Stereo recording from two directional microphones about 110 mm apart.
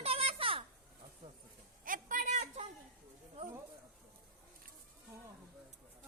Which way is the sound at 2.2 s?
90° right.